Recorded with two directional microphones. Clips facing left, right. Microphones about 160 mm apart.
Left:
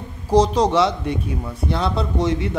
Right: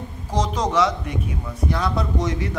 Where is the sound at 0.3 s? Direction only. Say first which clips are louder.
Left 7 dB; 35° left (ahead or behind).